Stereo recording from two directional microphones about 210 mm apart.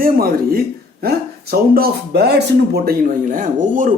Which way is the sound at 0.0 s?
45° right (ahead or behind).